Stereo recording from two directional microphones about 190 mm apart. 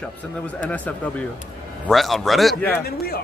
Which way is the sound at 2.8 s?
55° left (ahead or behind).